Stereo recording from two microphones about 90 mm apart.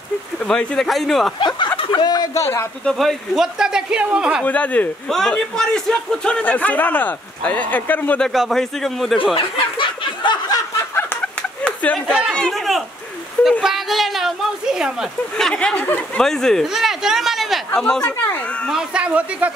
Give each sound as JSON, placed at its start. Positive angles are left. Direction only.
{"t": 0.4, "sound": "a man's voice", "side_deg": 10}
{"t": 2.0, "sound": "a sound", "side_deg": 50}
{"t": 2.3, "sound": "speech", "side_deg": 25}
{"t": 2.8, "sound": "a man's voice", "side_deg": 5}
{"t": 4.5, "sound": "speech", "side_deg": 15}
{"t": 5.0, "sound": "a man's voice", "side_deg": 5}
{"t": 8.2, "sound": "a man's voice", "side_deg": 0}
{"t": 9.3, "sound": "snicker", "side_deg": 75}
{"t": 11.6, "sound": "a sound", "side_deg": 15}
{"t": 12.4, "sound": "a man's voice", "side_deg": 5}
{"t": 13.4, "sound": "a sound", "side_deg": -5}
{"t": 15.3, "sound": "speech", "side_deg": 10}
{"t": 16.6, "sound": "speech", "side_deg": -5}
{"t": 18.7, "sound": "speech", "side_deg": -10}